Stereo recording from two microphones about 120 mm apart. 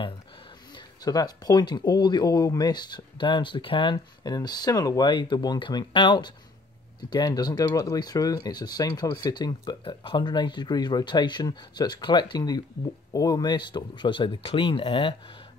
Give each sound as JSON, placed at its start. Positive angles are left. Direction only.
{"t": 0.7, "sound": "speech", "side_deg": 35}